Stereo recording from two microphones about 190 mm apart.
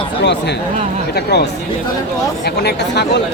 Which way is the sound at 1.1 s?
60° left (ahead or behind).